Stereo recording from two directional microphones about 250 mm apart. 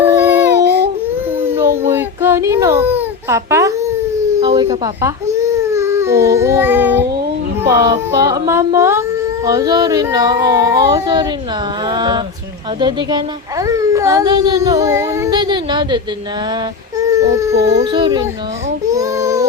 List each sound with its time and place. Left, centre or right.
0.0 s dog: centre
1.5 s a sound: centre
1.8 s baby cry: centre
4.4 s a child's voice: centre
17.0 s speech: centre
18.9 s baby cry: centre